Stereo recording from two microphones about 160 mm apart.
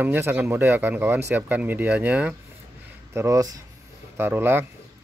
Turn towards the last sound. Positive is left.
turn(degrees=-15)  # may be behind; listen again after turning